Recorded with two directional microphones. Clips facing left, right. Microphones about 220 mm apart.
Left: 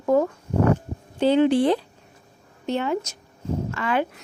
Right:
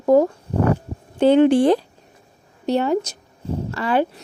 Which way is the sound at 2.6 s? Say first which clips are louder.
Right 5 dB; 35° right (ahead or behind).